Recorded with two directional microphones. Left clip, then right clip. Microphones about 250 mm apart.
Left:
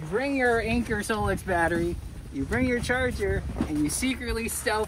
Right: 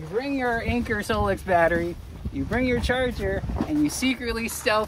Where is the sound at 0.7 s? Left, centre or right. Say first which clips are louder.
Right 2 dB; right.